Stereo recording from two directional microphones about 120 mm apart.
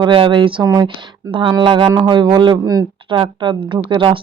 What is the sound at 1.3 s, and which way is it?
Speech, 40° right (ahead or behind).